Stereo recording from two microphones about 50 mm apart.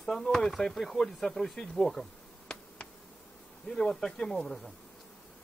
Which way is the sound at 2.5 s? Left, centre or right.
Centre.